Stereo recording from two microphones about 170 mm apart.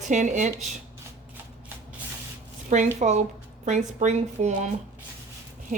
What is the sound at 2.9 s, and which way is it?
Speech, 45° right (ahead or behind).